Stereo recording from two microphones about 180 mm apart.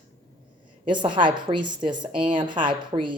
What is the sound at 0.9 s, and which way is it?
A woman's voice, 25° right (ahead or behind).